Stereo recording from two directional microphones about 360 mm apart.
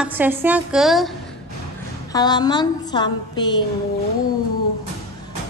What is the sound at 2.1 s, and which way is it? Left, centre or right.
A woman's voice, centre.